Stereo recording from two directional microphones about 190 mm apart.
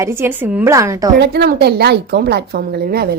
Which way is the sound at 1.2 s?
60° right (ahead or behind).